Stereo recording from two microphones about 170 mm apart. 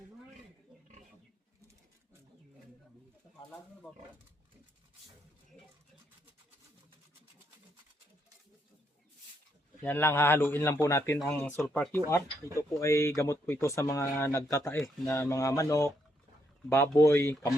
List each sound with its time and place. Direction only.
9.8 s a man's voice: 10° left (ahead or behind)